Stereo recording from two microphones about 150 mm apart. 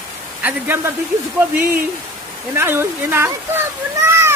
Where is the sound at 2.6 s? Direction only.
15° right (ahead or behind).